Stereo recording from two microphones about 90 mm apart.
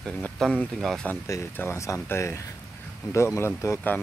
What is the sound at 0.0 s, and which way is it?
Speech, 10° left (ahead or behind).